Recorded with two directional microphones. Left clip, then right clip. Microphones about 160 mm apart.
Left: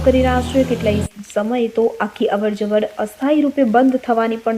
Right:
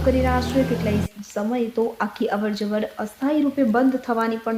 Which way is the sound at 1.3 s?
5° left (ahead or behind).